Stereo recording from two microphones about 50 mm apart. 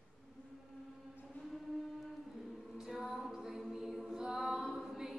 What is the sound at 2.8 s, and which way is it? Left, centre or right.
A capella, centre.